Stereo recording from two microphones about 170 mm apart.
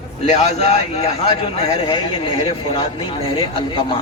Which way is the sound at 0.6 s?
40° left (ahead or behind).